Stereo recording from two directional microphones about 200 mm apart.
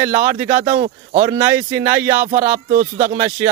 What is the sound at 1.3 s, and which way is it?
Speech, 15° right (ahead or behind).